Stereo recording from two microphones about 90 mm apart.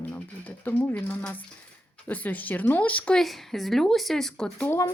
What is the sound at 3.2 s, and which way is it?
Speech, centre (ahead or behind).